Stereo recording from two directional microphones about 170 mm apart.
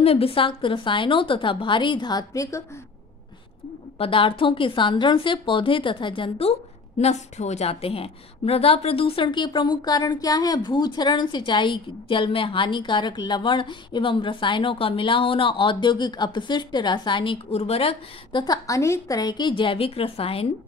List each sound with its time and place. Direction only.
0.0 s a woman's voice: 35° left (ahead or behind); by 2.8 s 15° left (ahead or behind)
4.0 s a woman's voice: 30° left (ahead or behind)